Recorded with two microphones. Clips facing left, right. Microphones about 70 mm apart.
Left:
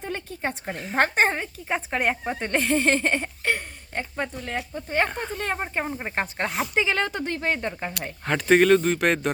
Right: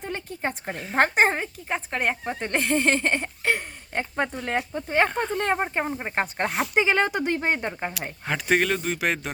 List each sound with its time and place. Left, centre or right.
0.0 s speech: centre
1.6 s speech: centre
3.4 s speech: centre
4.7 s speech: centre
5.0 s speech: centre
5.4 s speech: right
5.8 s speech: centre
6.7 s speech: right
8.2 s speech: centre